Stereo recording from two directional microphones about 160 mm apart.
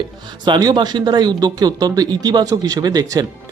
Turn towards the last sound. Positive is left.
turn(degrees=-25)  # may be behind; listen again after turning